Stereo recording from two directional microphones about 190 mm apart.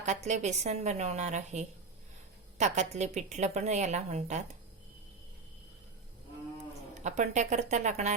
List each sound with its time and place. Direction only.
0.0 s a woman's voice: 40° right (ahead or behind)
7.0 s a woman's voice: 40° right (ahead or behind)